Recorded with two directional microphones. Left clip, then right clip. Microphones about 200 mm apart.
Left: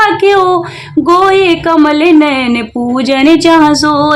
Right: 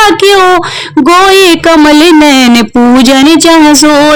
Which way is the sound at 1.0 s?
45° right (ahead or behind).